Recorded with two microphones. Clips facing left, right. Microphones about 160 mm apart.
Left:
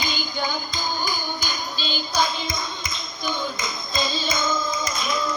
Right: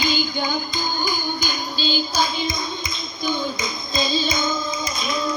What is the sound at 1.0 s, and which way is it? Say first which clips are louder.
Clapping: right 3 dB; 30° right (ahead or behind).